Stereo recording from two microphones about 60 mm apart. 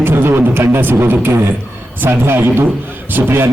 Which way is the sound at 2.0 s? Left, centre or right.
Right.